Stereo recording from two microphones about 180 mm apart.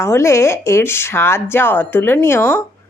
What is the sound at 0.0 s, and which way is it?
Speech, 15° left (ahead or behind).